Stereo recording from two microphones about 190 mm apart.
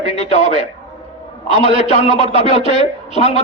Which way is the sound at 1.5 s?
35° left (ahead or behind).